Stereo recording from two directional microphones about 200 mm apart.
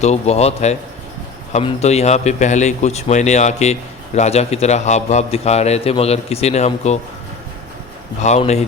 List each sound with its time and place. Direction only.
0.0 s a man's voice: 35° left (ahead or behind)
8.2 s a man's voice: 35° left (ahead or behind)